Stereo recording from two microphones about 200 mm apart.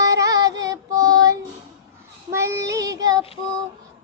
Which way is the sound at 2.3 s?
15° right (ahead or behind).